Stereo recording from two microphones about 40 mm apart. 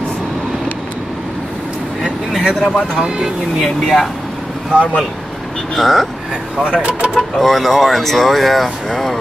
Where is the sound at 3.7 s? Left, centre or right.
Centre.